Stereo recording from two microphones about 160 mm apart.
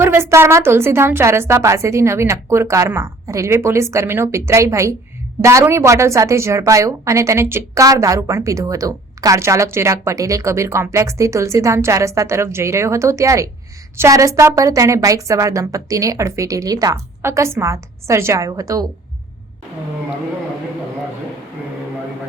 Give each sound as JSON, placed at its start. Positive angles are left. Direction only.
{"t": 0.0, "sound": "a woman's voice", "side_deg": -15}